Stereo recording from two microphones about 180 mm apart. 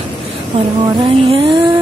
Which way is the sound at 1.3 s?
30° right (ahead or behind).